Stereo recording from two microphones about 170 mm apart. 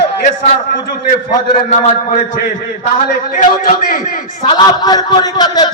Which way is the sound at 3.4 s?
55° left (ahead or behind).